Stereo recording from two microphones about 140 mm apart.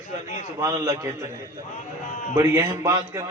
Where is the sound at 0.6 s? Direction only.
20° right (ahead or behind).